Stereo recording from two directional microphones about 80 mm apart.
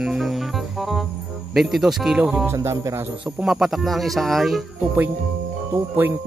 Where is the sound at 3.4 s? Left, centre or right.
Centre.